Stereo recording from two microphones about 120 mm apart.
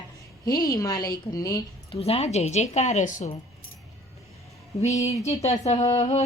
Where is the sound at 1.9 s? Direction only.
55° left (ahead or behind); by 3.3 s 85° left.